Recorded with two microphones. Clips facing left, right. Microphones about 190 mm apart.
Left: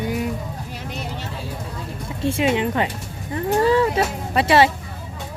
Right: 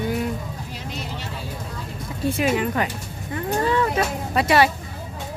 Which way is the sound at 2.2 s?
25° left (ahead or behind).